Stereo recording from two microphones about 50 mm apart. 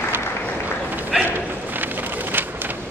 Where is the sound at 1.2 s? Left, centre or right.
Right.